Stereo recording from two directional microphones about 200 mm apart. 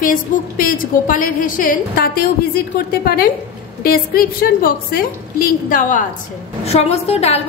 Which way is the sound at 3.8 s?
45° left (ahead or behind).